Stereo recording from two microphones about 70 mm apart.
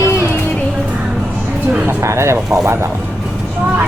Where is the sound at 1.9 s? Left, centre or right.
Right.